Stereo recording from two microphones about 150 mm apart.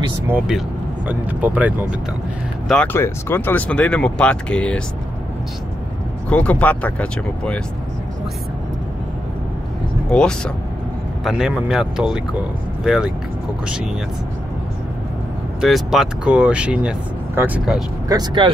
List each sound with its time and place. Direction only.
0.3 s speech: 5° right (ahead or behind)
2.7 s speech: 10° left (ahead or behind)
6.2 s speech: 10° left (ahead or behind)
10.0 s speech: 5° left (ahead or behind)
15.6 s speech: centre (ahead or behind)
18.0 s speech: 25° right (ahead or behind)